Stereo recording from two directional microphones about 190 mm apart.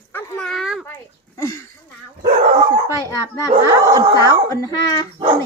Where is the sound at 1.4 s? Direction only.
15° left (ahead or behind).